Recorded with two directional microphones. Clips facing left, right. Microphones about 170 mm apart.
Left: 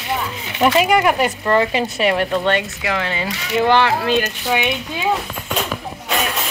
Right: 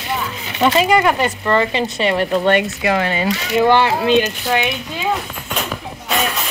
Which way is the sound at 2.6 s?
50° right (ahead or behind).